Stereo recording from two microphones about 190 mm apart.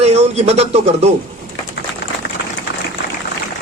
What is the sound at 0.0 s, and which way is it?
A man's voice, 35° right (ahead or behind).